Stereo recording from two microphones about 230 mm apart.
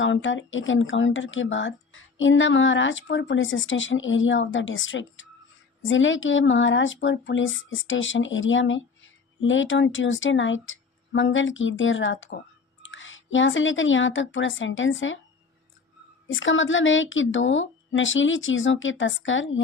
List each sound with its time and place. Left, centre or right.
0.0 s speech: left
16.2 s speech: left